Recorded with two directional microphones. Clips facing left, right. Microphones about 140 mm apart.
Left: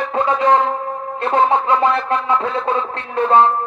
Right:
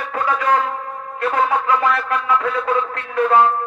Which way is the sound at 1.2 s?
25° left (ahead or behind).